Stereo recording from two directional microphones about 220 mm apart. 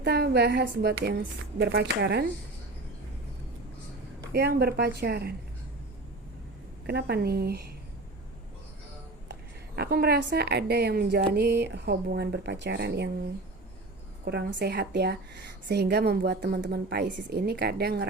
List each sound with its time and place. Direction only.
0.0 s a woman's voice: 50° right (ahead or behind)
4.3 s a woman's voice: 45° right (ahead or behind)
6.8 s a woman's voice: 45° right (ahead or behind)
9.3 s a woman's voice: 45° right (ahead or behind)
14.3 s a woman's voice: 50° right (ahead or behind)